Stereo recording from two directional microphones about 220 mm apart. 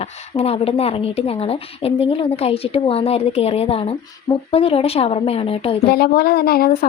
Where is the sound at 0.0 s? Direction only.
25° left (ahead or behind).